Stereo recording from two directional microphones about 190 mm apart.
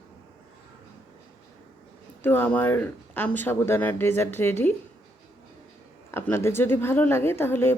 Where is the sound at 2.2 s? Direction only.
10° left (ahead or behind).